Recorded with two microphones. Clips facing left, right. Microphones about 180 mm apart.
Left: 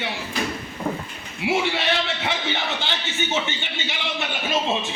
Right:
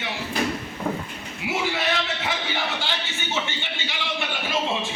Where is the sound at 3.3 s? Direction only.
20° left (ahead or behind).